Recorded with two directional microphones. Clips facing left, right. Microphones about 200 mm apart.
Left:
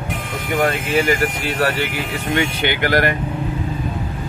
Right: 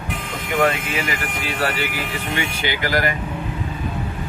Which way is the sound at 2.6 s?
60° left (ahead or behind).